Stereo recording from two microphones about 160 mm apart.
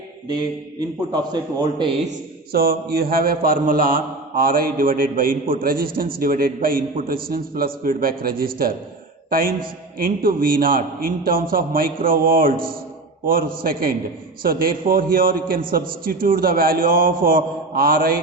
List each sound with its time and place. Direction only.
0.3 s a man's voice: 25° right (ahead or behind)
2.5 s a man's voice: 70° right (ahead or behind)
10.0 s a man's voice: 65° right (ahead or behind)